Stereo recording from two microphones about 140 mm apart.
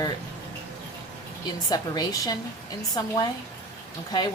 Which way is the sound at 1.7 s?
25° left (ahead or behind).